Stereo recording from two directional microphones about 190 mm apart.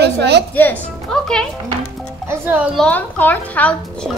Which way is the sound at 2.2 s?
10° right (ahead or behind).